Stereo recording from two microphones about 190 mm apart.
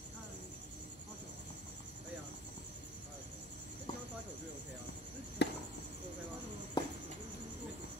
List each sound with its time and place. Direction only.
5.4 s chop: 60° left (ahead or behind)
6.8 s insect: 20° left (ahead or behind)